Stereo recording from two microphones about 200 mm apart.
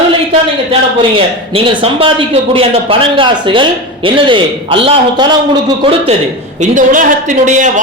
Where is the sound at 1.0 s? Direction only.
25° right (ahead or behind).